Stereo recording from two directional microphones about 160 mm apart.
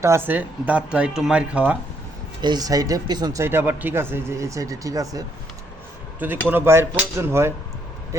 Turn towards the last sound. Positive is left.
turn(degrees=-15)  # may be behind; listen again after turning